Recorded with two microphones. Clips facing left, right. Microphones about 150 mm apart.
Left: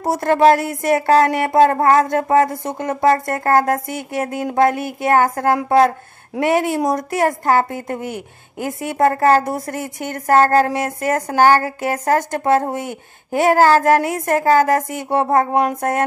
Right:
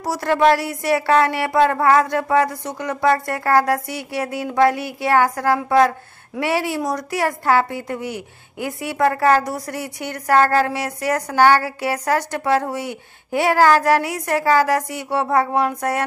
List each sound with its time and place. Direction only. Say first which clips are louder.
0.1 s a woman's voice: left 3 dB; 45° left (ahead or behind)